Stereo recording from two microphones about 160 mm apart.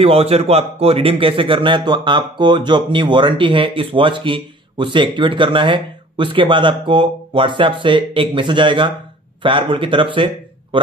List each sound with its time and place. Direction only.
0.0 s speech: 40° right (ahead or behind)